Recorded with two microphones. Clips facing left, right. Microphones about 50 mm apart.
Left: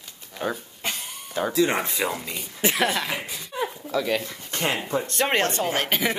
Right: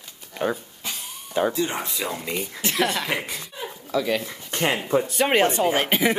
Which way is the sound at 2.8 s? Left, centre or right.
Centre.